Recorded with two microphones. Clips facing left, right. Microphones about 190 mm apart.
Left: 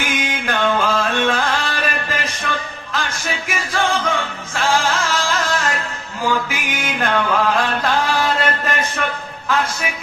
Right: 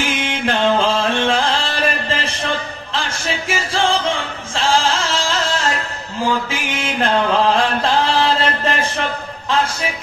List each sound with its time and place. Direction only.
0.0 s music: 30° right (ahead or behind)
6.5 s chant: 30° right (ahead or behind)